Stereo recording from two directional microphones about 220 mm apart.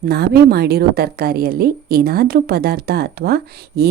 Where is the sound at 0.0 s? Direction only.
45° right (ahead or behind).